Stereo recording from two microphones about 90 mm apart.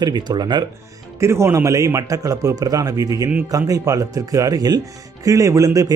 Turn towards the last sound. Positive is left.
turn(degrees=-40)  # may be behind; listen again after turning